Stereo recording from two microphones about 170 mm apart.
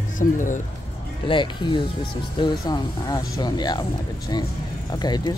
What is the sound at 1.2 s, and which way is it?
Speech, 30° left (ahead or behind).